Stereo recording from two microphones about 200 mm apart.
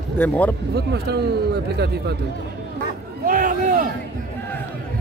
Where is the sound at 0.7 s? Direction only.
55° right (ahead or behind).